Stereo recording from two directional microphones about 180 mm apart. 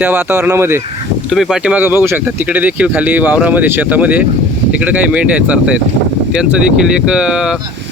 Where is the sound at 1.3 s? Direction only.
Centre (ahead or behind).